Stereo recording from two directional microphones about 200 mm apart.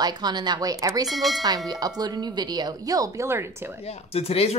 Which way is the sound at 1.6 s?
20° right (ahead or behind).